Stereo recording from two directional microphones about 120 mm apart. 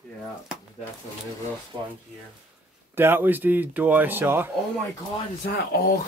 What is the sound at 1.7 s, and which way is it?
Speech, 35° right (ahead or behind).